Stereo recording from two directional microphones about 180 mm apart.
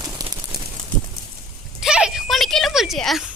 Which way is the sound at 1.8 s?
5° right (ahead or behind).